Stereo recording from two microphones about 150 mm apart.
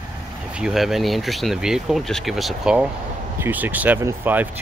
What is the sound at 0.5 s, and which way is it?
Speech, 5° right (ahead or behind).